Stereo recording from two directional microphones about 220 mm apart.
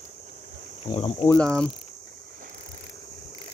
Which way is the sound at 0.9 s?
25° left (ahead or behind).